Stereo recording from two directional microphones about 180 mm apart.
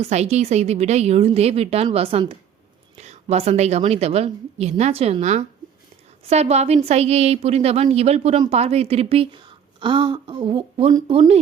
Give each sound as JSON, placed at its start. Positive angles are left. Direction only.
{"t": 0.0, "sound": "a woman's voice", "side_deg": -35}